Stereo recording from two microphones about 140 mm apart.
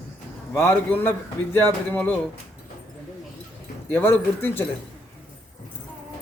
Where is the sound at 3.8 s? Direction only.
15° left (ahead or behind).